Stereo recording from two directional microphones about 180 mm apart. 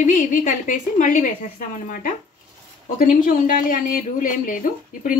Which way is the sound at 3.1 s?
50° left (ahead or behind).